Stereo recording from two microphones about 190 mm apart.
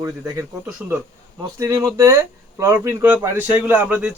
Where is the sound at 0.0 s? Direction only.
15° right (ahead or behind).